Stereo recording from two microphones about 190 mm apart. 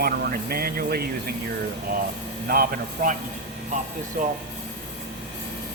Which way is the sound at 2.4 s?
50° right (ahead or behind).